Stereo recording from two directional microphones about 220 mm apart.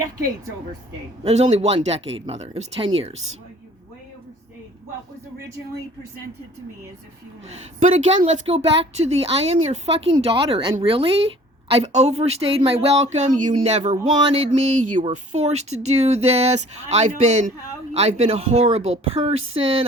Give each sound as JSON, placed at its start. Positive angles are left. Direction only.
{"t": 1.2, "sound": "speech", "side_deg": -30}
{"t": 7.8, "sound": "speech", "side_deg": -30}